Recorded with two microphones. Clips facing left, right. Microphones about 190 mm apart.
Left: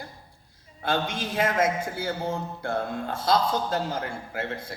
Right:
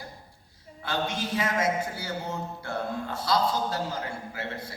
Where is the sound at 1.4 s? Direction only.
50° left (ahead or behind).